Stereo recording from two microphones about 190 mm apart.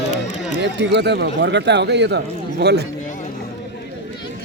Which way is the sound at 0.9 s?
65° right (ahead or behind).